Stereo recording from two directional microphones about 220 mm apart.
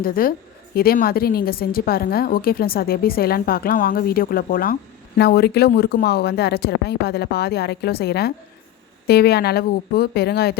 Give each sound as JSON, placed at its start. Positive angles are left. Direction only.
{"t": 0.0, "sound": "a woman's voice", "side_deg": 40}